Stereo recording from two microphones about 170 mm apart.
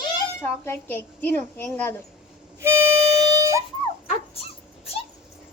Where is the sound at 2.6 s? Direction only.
15° right (ahead or behind).